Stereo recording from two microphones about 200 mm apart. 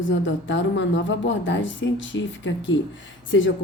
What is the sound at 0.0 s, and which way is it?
A woman's voice, 70° left (ahead or behind).